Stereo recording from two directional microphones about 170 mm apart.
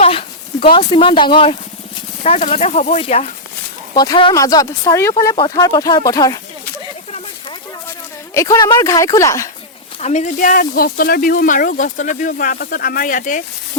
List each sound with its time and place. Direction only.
0.0 s a sound: 35° left (ahead or behind)
2.2 s speech: 40° left (ahead or behind)
3.9 s speech: 25° left (ahead or behind)
8.3 s speech: 20° left (ahead or behind)
10.0 s speech: 45° left (ahead or behind)